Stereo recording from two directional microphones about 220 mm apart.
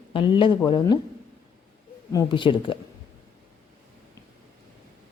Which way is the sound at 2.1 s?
20° left (ahead or behind).